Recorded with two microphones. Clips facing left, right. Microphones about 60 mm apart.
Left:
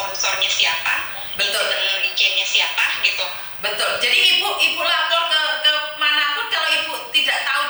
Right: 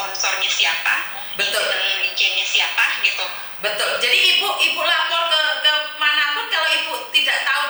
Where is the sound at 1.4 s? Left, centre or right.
Right.